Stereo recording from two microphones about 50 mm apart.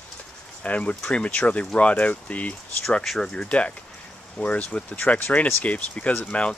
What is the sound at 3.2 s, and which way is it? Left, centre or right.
Speech, centre.